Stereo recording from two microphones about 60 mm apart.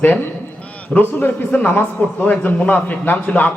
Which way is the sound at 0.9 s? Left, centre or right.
Left.